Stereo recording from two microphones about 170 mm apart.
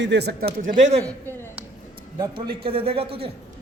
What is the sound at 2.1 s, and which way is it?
A man's voice, 25° right (ahead or behind).